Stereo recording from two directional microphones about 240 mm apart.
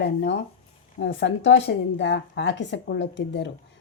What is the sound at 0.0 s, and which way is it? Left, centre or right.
A woman's voice, left.